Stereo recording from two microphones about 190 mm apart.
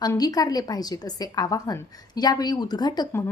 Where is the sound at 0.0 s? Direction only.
20° left (ahead or behind).